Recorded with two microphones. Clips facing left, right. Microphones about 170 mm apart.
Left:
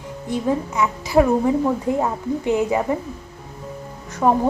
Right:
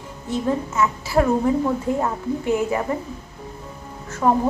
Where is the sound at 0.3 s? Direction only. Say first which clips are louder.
Left 1 dB; 15° left (ahead or behind).